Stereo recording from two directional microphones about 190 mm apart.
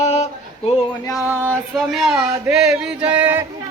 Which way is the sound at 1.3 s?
5° left (ahead or behind).